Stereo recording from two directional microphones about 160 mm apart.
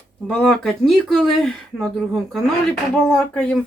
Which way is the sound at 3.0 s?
5° left (ahead or behind).